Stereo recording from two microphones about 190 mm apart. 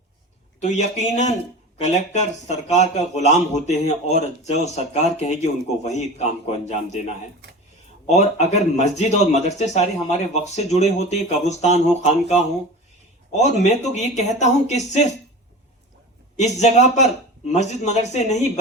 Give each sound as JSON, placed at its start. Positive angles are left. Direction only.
{"t": 0.6, "sound": "speech", "side_deg": 40}
{"t": 16.4, "sound": "speech", "side_deg": 35}